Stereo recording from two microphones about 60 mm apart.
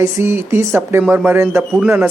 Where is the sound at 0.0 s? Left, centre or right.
Right.